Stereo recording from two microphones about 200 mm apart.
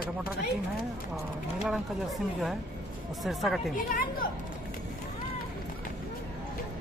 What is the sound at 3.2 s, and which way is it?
Speech, centre (ahead or behind).